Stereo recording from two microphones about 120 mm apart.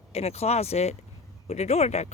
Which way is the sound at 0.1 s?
60° left (ahead or behind).